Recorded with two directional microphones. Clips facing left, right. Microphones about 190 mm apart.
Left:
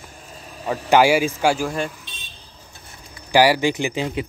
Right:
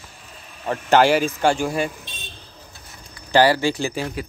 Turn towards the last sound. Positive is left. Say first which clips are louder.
# left 2 dB
turn(degrees=20)  # may be behind; listen again after turning